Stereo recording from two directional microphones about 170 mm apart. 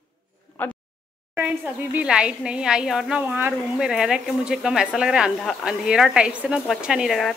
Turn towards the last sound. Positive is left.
turn(degrees=0)  # may be behind; listen again after turning